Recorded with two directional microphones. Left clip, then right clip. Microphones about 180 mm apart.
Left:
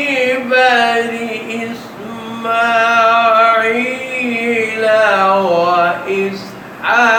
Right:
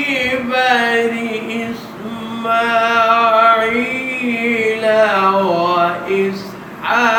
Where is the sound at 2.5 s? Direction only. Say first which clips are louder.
Left 2 dB; 15° left (ahead or behind).